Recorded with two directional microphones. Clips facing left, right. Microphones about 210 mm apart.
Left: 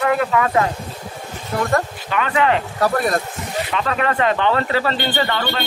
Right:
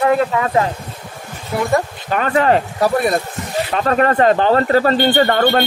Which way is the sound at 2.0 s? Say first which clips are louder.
Right 4 dB; 40° right (ahead or behind).